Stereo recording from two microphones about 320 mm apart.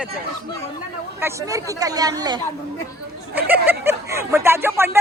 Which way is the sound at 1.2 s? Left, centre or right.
Centre.